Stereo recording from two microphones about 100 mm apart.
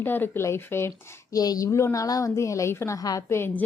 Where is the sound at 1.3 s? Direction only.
40° left (ahead or behind).